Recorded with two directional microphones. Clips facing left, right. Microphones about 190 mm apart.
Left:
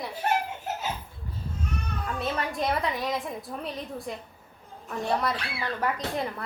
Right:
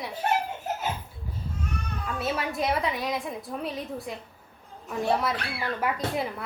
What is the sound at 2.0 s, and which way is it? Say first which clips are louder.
A woman's voice: right 1 dB; 5° right (ahead or behind).